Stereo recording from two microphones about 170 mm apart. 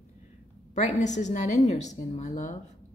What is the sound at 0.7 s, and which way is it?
A woman's voice, 45° left (ahead or behind).